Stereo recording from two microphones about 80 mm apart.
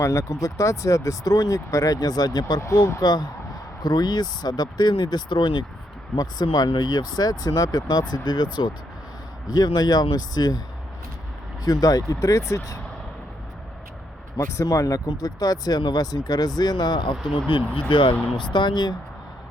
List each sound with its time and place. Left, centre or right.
0.0 s speech: left
2.6 s speech: left
3.0 s speech: left
6.1 s speech: left
9.5 s speech: left
11.6 s speech: left
14.3 s speech: left
17.7 s speech: left
18.3 s speech: left